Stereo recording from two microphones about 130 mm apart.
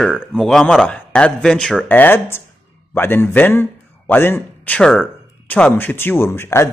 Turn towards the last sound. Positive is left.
turn(degrees=20)  # may be behind; listen again after turning